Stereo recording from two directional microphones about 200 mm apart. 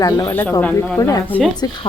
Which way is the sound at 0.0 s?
20° left (ahead or behind).